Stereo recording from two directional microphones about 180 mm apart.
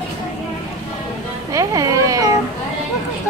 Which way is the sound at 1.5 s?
20° right (ahead or behind).